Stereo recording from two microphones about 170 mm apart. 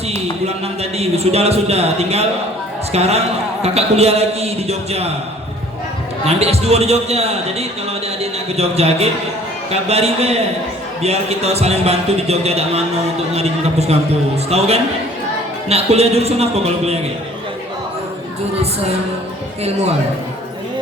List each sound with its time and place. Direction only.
0.1 s a man's voice: 40° right (ahead or behind)
6.2 s a man's voice: 35° right (ahead or behind)
15.7 s a man's voice: 35° right (ahead or behind)